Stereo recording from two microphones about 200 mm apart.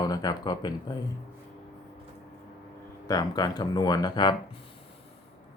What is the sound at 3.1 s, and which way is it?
Speech, 20° left (ahead or behind).